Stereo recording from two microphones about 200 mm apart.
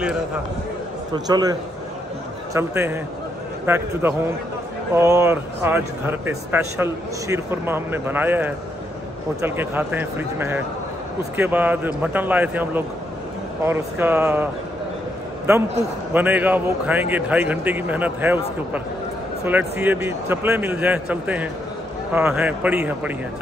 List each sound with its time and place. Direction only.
1.1 s a man's voice: 20° right (ahead or behind)
16.1 s speech: 10° right (ahead or behind)
19.4 s speech: 10° right (ahead or behind)